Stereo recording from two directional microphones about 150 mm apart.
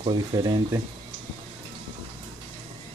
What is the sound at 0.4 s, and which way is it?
Speech, 25° right (ahead or behind).